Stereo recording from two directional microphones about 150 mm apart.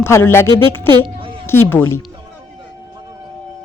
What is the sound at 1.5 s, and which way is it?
Speech, 15° left (ahead or behind).